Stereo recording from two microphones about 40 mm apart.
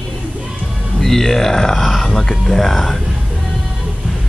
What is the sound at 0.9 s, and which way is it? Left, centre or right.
Speech, centre.